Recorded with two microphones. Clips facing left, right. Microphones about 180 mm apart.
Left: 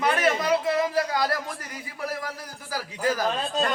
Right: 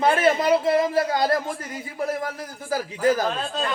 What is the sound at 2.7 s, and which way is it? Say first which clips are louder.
Speech: right 6 dB; 25° right (ahead or behind).